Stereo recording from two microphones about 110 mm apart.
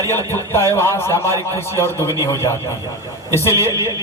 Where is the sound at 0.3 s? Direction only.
20° left (ahead or behind).